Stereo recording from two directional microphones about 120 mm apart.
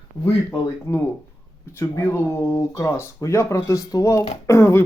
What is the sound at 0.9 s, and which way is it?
Speech, 25° left (ahead or behind).